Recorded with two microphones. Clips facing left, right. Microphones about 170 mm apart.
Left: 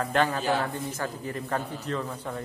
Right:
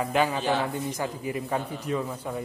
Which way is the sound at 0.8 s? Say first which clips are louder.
Right 2 dB; 10° right (ahead or behind).